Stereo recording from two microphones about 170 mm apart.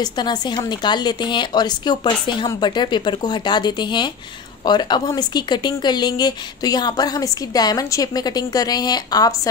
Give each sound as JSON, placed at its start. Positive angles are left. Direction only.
{"t": 0.0, "sound": "speech", "side_deg": 25}